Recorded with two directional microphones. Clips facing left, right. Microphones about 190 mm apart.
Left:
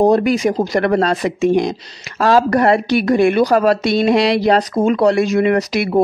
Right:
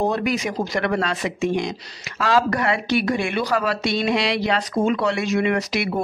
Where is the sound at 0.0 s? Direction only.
35° left (ahead or behind).